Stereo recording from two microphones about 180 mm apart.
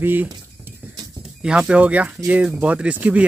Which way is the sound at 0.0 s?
10° right (ahead or behind).